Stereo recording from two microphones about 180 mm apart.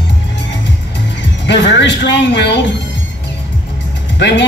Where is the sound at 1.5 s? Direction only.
80° left.